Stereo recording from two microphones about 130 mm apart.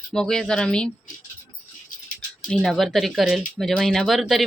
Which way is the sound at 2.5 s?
5° left (ahead or behind).